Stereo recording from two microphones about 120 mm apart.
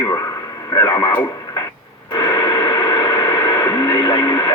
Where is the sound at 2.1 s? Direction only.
25° left (ahead or behind).